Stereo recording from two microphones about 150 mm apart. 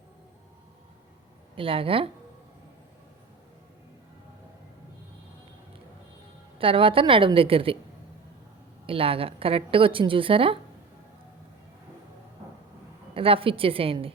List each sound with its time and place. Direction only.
1.5 s a woman's voice: 40° right (ahead or behind)
6.6 s a woman's voice: 35° right (ahead or behind)
8.9 s a woman's voice: 40° right (ahead or behind)
13.1 s a woman's voice: 35° right (ahead or behind)